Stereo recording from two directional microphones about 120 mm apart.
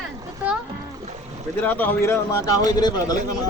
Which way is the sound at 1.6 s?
15° left (ahead or behind).